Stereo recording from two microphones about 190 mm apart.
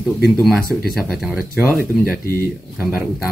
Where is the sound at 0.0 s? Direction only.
Centre (ahead or behind).